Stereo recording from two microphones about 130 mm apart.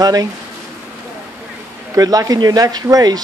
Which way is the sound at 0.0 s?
30° right (ahead or behind).